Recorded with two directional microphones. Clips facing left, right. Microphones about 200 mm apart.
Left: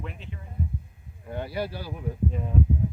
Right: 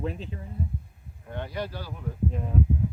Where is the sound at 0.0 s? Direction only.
35° right (ahead or behind).